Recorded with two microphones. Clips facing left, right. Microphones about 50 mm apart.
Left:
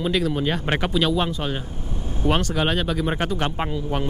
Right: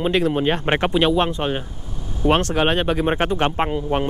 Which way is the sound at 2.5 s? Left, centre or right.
Right.